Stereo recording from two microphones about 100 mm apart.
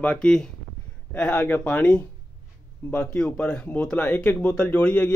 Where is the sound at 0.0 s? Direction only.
10° left (ahead or behind).